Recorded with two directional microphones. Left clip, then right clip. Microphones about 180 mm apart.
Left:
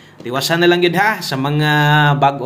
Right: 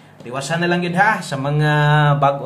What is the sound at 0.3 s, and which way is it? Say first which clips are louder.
Speech: left 6 dB; 40° left (ahead or behind).